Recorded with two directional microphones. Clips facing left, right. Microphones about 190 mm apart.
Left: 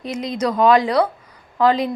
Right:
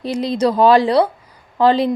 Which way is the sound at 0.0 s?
30° right (ahead or behind).